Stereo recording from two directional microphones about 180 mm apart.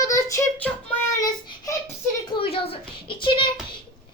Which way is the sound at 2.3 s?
30° left (ahead or behind).